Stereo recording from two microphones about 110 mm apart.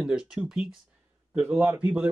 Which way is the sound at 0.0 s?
10° right (ahead or behind).